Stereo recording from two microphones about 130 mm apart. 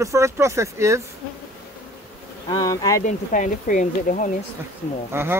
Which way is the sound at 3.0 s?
75° left (ahead or behind).